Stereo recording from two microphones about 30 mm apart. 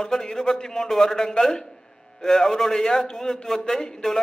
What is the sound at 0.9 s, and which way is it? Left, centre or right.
Speech, centre.